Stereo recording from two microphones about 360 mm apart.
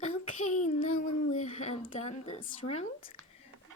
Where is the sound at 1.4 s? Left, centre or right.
Centre.